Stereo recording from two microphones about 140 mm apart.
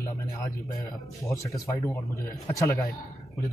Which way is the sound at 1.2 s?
20° left (ahead or behind).